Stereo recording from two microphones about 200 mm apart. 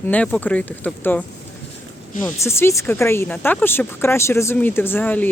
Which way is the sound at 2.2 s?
15° left (ahead or behind).